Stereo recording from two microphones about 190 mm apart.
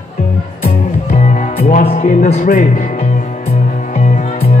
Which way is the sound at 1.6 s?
50° left (ahead or behind).